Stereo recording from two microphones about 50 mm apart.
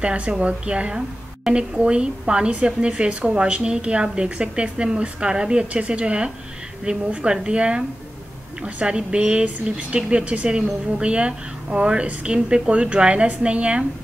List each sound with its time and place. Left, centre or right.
0.0 s a woman's voice: right
8.8 s a woman's voice: centre